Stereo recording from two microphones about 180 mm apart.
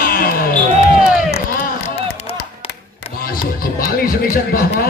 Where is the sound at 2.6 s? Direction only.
30° left (ahead or behind).